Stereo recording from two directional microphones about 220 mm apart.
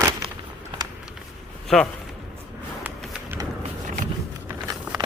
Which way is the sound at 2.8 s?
5° right (ahead or behind).